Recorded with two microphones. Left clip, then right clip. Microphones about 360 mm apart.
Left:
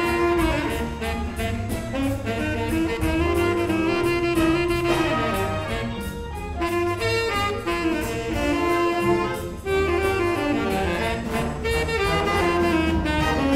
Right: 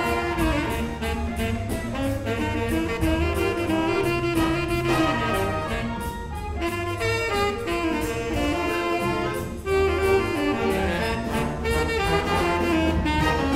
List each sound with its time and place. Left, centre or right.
3.7 s saxophone: left
6.6 s saxophone: left
9.7 s music: left
11.6 s music: left